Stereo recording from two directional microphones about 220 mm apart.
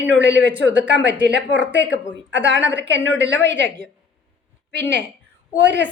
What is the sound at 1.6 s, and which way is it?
Speech, 55° left (ahead or behind).